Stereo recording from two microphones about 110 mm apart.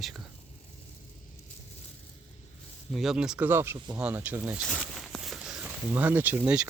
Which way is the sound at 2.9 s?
Centre (ahead or behind).